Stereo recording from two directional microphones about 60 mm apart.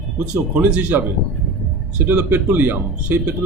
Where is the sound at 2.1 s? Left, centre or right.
Right.